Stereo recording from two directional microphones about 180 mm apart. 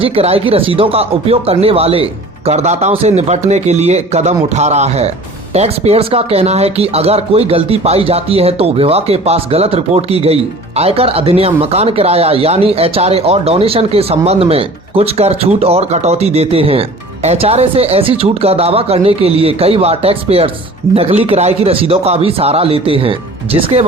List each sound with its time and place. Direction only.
0.0 s speech: 30° right (ahead or behind)